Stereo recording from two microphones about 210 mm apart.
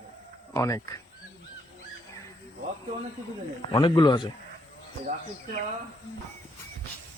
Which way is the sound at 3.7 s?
20° left (ahead or behind).